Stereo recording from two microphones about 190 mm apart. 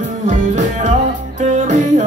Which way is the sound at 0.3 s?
40° right (ahead or behind).